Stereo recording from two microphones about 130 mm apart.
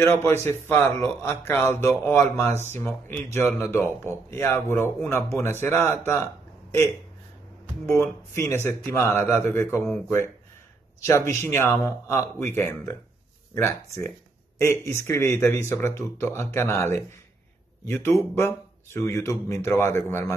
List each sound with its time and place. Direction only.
0.0 s speech: 20° left (ahead or behind)
7.9 s speech: 20° left (ahead or behind)